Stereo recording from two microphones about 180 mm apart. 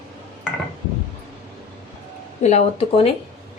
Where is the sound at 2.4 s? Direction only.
35° left (ahead or behind).